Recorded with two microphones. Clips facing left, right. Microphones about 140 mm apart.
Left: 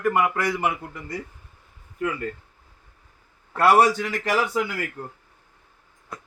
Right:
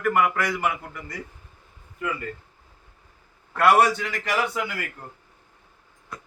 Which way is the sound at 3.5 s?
35° left (ahead or behind).